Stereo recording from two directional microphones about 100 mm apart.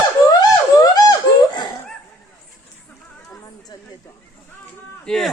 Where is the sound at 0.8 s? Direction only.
40° left (ahead or behind).